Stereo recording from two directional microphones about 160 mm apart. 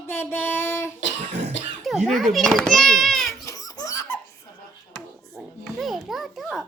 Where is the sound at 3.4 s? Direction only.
20° left (ahead or behind).